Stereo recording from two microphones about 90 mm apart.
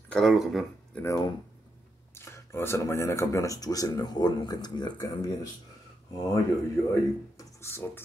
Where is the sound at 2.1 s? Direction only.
30° left (ahead or behind); by 5.3 s 45° left (ahead or behind).